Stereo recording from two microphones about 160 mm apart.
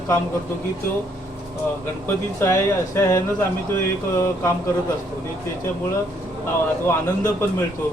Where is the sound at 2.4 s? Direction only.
15° left (ahead or behind).